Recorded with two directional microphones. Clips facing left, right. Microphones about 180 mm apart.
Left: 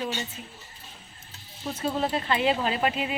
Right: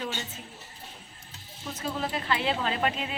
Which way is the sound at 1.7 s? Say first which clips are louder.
Left 5 dB; 30° left (ahead or behind).